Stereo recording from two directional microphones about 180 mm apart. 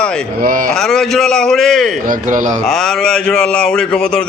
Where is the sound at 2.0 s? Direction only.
45° right (ahead or behind).